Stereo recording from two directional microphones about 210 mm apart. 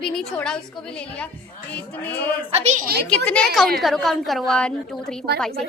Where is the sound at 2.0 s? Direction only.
5° left (ahead or behind).